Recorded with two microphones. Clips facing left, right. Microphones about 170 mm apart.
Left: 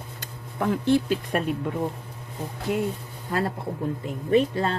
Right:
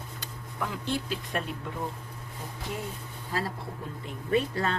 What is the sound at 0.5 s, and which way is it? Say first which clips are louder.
Speech: left 10 dB; 55° left (ahead or behind).